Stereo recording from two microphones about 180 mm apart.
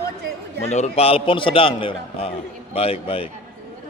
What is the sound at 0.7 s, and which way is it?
A man's voice, 35° left (ahead or behind).